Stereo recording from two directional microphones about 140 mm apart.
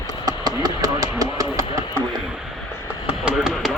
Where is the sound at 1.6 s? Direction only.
40° left (ahead or behind).